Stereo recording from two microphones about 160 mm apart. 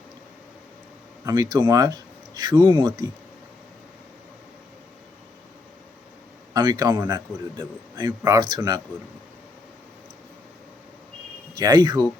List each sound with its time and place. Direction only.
1.2 s speech: 25° right (ahead or behind)
6.5 s speech: 25° right (ahead or behind)
11.5 s speech: 25° right (ahead or behind)